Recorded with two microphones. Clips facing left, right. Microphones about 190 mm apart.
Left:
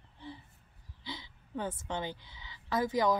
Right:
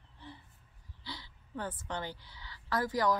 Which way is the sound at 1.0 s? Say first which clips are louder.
Left 3 dB; 20° left (ahead or behind).